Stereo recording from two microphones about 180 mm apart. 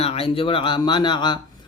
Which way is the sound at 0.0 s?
35° left (ahead or behind).